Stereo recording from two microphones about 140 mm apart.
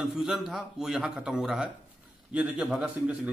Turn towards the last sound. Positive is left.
turn(degrees=-10)  # may be behind; listen again after turning